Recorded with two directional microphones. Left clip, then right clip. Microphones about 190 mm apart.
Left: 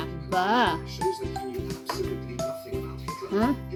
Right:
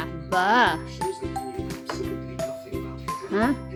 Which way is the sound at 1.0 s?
Centre (ahead or behind).